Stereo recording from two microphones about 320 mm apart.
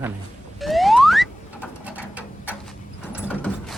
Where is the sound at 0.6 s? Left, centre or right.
Centre.